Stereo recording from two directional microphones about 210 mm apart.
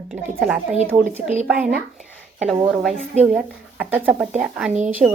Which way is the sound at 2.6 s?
5° right (ahead or behind).